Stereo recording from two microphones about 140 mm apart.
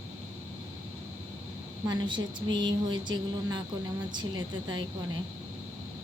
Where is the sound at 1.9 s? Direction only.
30° right (ahead or behind).